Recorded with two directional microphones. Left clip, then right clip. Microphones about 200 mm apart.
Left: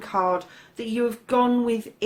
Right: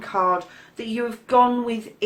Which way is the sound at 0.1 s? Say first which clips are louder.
Right 2 dB; 45° left (ahead or behind).